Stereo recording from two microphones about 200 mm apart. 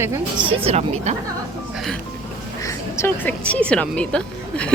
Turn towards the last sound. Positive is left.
turn(degrees=5)  # may be behind; listen again after turning